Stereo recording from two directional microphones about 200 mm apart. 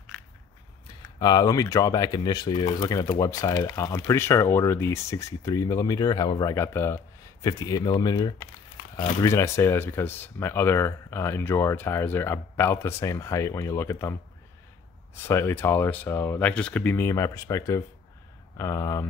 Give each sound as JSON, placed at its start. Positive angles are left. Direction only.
{"t": 0.1, "sound": "a sound", "side_deg": 0}
{"t": 1.2, "sound": "speech", "side_deg": 20}
{"t": 15.1, "sound": "speech", "side_deg": 10}